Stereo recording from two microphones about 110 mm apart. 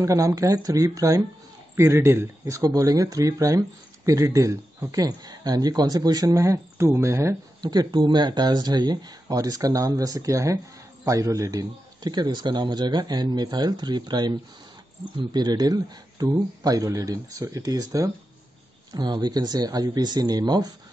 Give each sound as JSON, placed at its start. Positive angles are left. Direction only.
{"t": 0.0, "sound": "speech", "side_deg": -30}
{"t": 7.6, "sound": "speech", "side_deg": -35}